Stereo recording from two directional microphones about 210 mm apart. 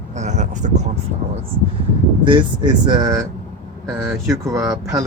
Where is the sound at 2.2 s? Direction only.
20° right (ahead or behind).